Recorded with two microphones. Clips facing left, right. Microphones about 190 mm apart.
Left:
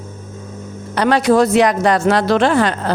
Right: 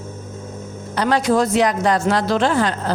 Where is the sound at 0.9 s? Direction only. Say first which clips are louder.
Left 4 dB; 70° left (ahead or behind).